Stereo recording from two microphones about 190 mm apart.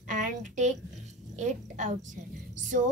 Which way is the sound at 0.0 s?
40° right (ahead or behind).